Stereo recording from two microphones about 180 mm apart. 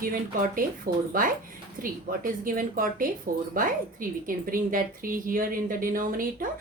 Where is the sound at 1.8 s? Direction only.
50° right (ahead or behind).